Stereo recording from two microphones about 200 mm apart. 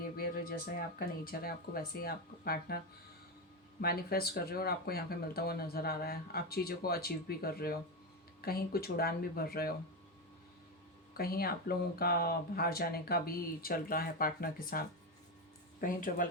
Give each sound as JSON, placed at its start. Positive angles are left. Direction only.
{"t": 0.2, "sound": "speech", "side_deg": 50}
{"t": 11.2, "sound": "speech", "side_deg": 50}